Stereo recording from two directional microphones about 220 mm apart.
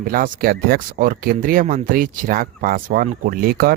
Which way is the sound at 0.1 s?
40° right (ahead or behind).